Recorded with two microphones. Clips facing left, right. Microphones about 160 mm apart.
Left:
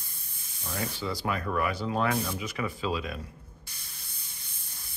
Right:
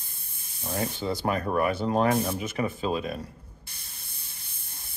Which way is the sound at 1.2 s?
35° right (ahead or behind).